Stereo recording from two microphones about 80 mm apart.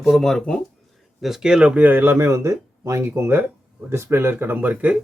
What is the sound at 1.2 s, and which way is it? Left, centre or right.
Speech, centre.